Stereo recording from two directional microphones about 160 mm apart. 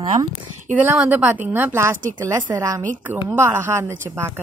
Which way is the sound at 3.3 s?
15° right (ahead or behind).